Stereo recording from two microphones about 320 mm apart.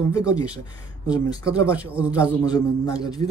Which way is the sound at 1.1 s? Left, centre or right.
Centre.